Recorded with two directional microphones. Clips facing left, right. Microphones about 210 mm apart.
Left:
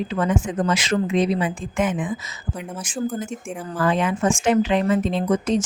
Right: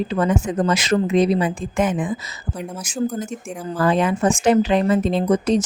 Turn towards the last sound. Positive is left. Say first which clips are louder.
# right 3 dB
turn(degrees=-35)  # may be behind; listen again after turning